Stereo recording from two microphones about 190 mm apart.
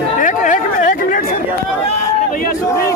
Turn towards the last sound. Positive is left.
turn(degrees=45)  # may be behind; listen again after turning